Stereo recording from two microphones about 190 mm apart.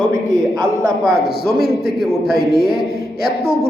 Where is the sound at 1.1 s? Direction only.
55° left (ahead or behind).